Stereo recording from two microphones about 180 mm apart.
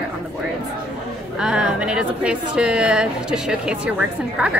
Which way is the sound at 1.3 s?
5° right (ahead or behind).